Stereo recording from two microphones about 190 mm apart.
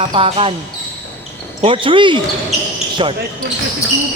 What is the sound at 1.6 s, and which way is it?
Speech, 25° right (ahead or behind).